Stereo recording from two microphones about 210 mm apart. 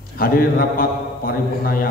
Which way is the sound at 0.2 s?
45° left (ahead or behind).